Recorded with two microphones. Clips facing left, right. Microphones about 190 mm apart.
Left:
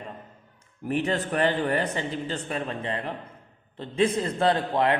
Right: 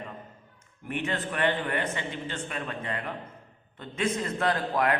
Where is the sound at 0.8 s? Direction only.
35° left (ahead or behind).